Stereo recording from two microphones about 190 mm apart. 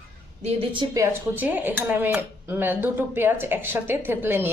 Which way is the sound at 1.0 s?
10° right (ahead or behind).